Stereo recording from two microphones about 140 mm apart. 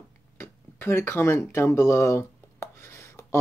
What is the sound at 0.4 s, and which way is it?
Speech, 15° left (ahead or behind).